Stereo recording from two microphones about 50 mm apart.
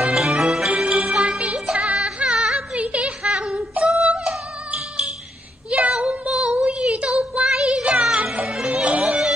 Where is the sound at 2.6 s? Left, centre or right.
Right.